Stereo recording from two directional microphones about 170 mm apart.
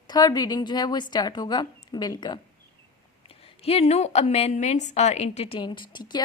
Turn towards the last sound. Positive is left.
turn(degrees=25)  # may be behind; listen again after turning